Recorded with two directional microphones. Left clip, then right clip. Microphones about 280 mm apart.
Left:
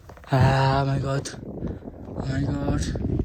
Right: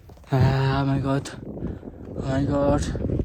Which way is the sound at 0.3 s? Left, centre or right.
Left.